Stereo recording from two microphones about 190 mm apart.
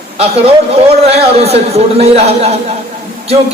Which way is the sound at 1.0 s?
35° right (ahead or behind).